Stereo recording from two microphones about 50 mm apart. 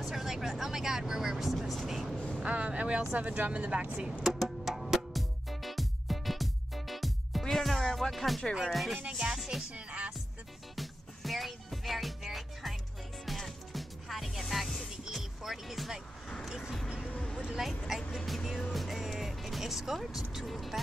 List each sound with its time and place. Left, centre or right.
0.0 s speech: centre
2.1 s vehicle: left
2.4 s speech: right
4.2 s music: centre
8.7 s speech: centre
9.1 s speech: centre
9.4 s music: centre
9.7 s music: right
10.8 s music: centre
17.4 s a sound: centre
18.1 s music: centre